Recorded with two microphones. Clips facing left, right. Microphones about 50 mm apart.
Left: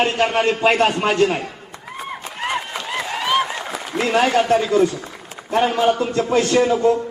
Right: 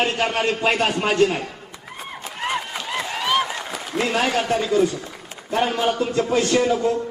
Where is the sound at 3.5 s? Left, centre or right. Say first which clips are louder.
Left 2 dB; centre.